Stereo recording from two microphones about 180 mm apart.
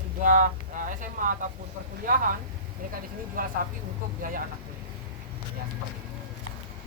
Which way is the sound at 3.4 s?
50° right (ahead or behind).